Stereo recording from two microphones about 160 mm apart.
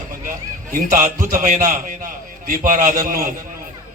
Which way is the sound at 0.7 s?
55° right (ahead or behind).